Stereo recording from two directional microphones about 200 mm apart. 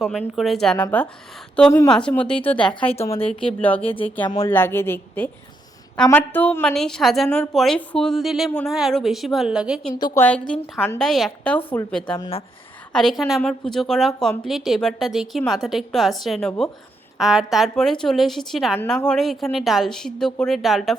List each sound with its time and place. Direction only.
0.0 s a woman's voice: centre (ahead or behind)
3.1 s speech: 30° left (ahead or behind)
4.4 s a woman's voice: 10° left (ahead or behind)
9.9 s a woman's voice: 15° left (ahead or behind)